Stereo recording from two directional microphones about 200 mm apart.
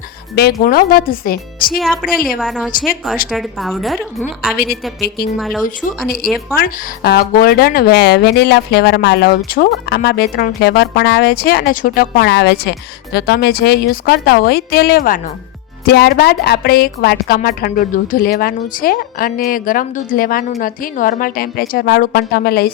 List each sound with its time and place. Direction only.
0.3 s a woman's voice: 50° left (ahead or behind)
1.8 s a woman's voice: centre (ahead or behind)
4.5 s a woman's voice: 50° left (ahead or behind)
5.4 s a woman's voice: centre (ahead or behind)
6.6 s a woman's voice: 50° left (ahead or behind)